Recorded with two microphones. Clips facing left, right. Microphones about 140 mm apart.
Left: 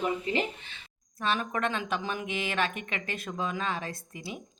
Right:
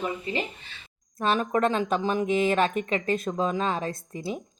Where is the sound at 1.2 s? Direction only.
40° right (ahead or behind).